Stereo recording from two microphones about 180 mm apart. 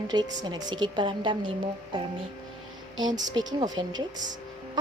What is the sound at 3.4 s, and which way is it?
Speech, 20° right (ahead or behind).